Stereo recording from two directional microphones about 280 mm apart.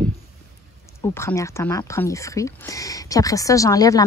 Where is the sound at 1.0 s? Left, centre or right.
Centre.